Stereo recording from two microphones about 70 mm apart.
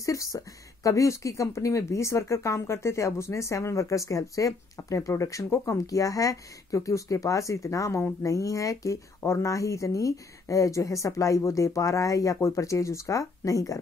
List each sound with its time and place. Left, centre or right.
0.0 s speech: left